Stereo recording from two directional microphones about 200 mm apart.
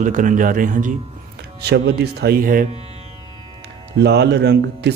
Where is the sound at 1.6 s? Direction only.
55° right (ahead or behind).